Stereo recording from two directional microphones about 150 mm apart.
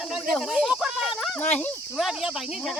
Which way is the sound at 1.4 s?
10° left (ahead or behind).